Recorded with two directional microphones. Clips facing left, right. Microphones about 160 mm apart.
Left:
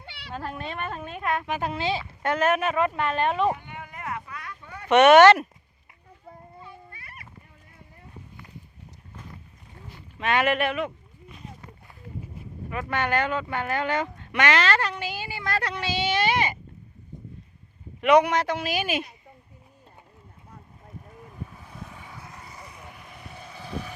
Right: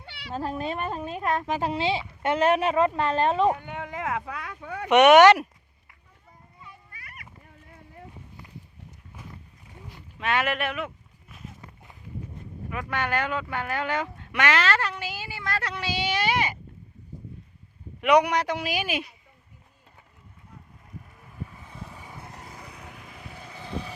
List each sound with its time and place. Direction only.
0.0 s cat: 5° right (ahead or behind)
0.3 s speech: 35° right (ahead or behind)
3.7 s a sound: 85° right
4.6 s speech: 90° right
4.9 s a woman's voice: 15° right (ahead or behind)
6.6 s a sound: 30° left (ahead or behind)
9.8 s a sound: 5° right (ahead or behind)
12.7 s speech: 5° right (ahead or behind)
18.1 s a woman's voice: 15° right (ahead or behind)
21.6 s vehicle: 5° left (ahead or behind)
23.4 s vehicle: 15° right (ahead or behind)